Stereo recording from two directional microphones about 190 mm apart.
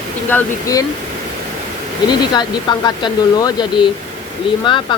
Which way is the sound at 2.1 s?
20° left (ahead or behind).